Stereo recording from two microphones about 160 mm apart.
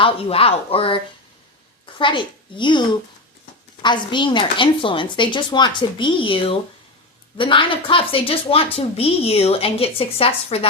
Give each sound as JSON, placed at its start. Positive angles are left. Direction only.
{"t": 0.0, "sound": "a woman's voice", "side_deg": 35}
{"t": 3.8, "sound": "a woman's voice", "side_deg": 30}